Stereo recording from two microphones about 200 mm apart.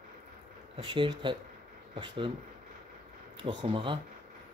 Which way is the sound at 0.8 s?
25° right (ahead or behind).